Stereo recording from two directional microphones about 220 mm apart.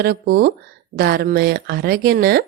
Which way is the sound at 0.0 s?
45° right (ahead or behind).